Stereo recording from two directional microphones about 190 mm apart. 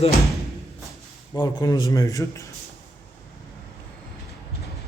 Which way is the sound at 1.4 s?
20° left (ahead or behind).